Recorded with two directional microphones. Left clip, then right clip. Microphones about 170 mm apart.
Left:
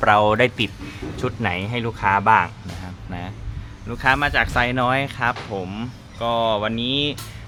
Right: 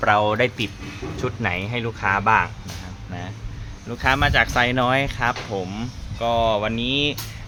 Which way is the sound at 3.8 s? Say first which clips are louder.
Left 1 dB; centre (ahead or behind).